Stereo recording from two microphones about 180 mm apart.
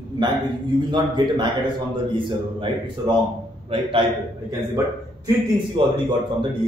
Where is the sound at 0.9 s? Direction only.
25° right (ahead or behind).